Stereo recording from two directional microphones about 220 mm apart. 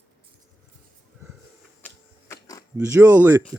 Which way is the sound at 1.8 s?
10° left (ahead or behind).